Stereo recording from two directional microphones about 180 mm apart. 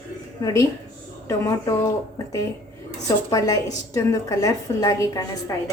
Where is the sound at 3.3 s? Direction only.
20° left (ahead or behind).